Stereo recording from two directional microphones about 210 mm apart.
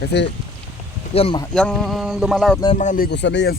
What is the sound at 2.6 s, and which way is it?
Speech, 35° left (ahead or behind).